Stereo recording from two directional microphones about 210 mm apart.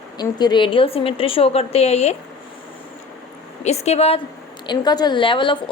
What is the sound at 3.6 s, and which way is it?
A woman's voice, 30° left (ahead or behind).